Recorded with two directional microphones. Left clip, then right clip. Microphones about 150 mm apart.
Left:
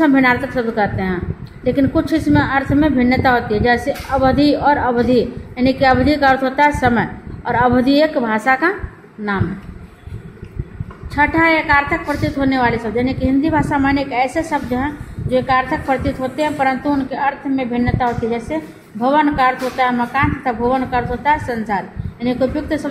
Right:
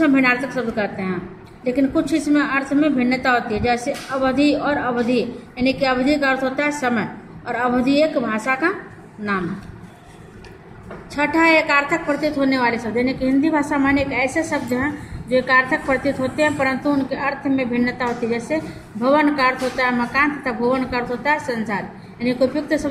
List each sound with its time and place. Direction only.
0.0 s a woman's voice: 40° left (ahead or behind)
11.1 s a woman's voice: 35° left (ahead or behind)